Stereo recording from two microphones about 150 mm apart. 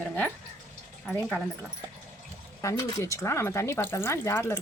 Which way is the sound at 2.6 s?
20° left (ahead or behind).